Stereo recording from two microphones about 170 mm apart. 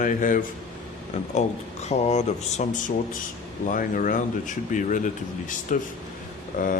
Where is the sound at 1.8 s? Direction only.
40° left (ahead or behind).